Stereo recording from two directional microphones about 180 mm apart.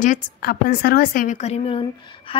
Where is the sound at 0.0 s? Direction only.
50° left (ahead or behind).